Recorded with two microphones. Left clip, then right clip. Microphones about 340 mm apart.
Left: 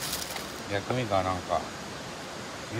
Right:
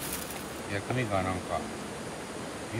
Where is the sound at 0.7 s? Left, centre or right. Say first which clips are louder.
Left 3 dB; centre.